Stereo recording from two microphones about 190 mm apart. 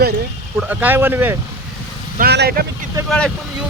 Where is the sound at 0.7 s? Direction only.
10° right (ahead or behind).